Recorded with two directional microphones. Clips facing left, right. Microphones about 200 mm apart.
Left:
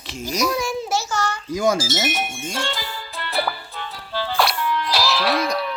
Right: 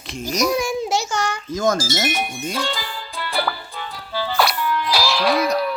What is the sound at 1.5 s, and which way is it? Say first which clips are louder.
Wind chime: left 1 dB; 10° left (ahead or behind).